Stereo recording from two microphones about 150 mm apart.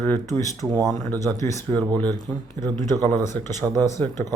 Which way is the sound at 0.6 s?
25° right (ahead or behind).